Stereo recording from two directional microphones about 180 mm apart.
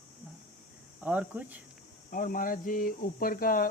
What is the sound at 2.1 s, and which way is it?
Speech, 50° left (ahead or behind).